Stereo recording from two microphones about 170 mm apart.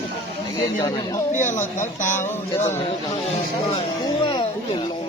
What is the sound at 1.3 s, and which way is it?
Speech, 45° left (ahead or behind).